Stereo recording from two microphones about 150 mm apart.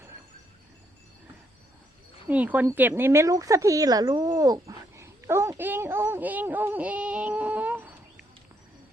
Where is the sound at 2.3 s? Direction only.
10° right (ahead or behind).